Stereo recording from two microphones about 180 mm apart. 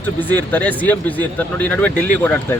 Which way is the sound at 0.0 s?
10° left (ahead or behind).